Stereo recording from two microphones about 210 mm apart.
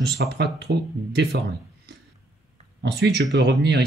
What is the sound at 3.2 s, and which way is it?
Speech, 55° right (ahead or behind).